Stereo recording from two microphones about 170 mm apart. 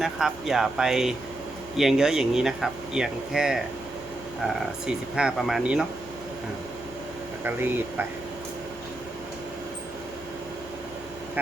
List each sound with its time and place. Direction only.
0.0 s speech: centre (ahead or behind)
7.4 s speech: 10° right (ahead or behind)